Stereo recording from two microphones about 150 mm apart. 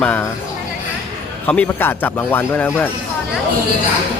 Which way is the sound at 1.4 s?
10° left (ahead or behind).